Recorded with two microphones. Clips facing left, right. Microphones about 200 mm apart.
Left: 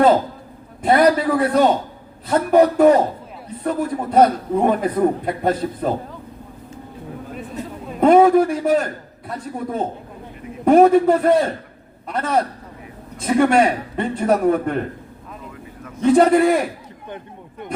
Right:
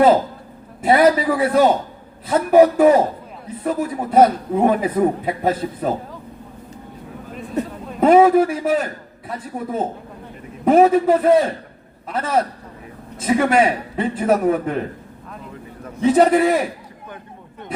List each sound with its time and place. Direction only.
0.8 s a man's voice: 5° right (ahead or behind)
8.0 s a man's voice: 5° right (ahead or behind)
16.0 s a man's voice: 5° right (ahead or behind)